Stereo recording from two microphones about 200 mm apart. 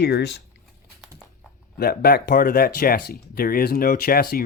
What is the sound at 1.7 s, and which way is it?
Speech, 50° left (ahead or behind).